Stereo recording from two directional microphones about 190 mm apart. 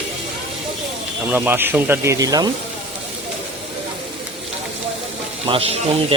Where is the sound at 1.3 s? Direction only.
10° right (ahead or behind).